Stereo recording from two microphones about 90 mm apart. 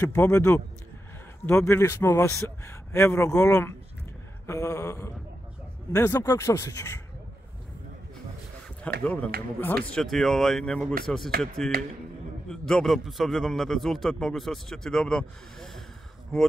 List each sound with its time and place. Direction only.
0.0 s a man's voice: 25° left (ahead or behind)
8.8 s speech: 15° left (ahead or behind)
9.9 s a man's voice: 5° left (ahead or behind)